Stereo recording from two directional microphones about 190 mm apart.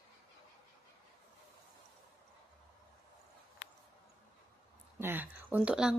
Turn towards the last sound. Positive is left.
turn(degrees=-5)  # may be behind; listen again after turning